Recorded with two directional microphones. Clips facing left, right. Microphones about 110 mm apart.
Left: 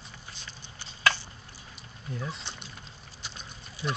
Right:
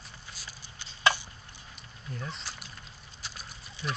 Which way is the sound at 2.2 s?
Centre (ahead or behind).